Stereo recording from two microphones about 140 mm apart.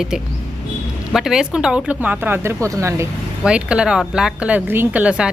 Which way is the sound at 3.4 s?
5° right (ahead or behind).